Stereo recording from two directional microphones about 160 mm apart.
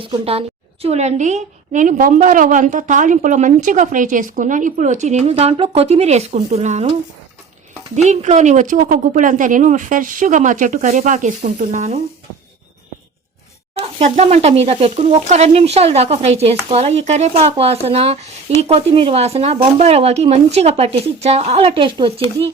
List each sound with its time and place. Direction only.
0.0 s a woman's voice: 35° right (ahead or behind)
7.9 s a woman's voice: 45° right (ahead or behind)
14.0 s speech: 40° right (ahead or behind)